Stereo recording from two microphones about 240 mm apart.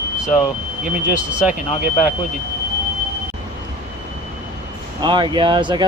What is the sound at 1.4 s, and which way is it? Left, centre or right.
Speech, centre.